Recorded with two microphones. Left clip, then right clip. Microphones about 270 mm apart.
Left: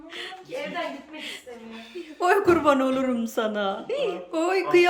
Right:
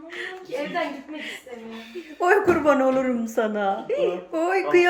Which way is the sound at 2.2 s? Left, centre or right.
Centre.